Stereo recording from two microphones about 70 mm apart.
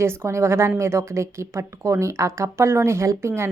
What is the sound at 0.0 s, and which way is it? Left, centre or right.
A woman's voice, right.